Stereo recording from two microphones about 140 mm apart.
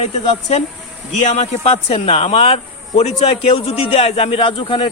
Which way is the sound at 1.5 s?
45° left (ahead or behind).